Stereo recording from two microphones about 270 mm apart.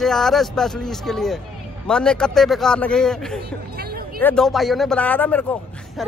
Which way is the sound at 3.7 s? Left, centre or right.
Right.